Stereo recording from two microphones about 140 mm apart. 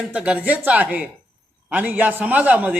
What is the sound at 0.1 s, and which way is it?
A man's voice, 10° right (ahead or behind).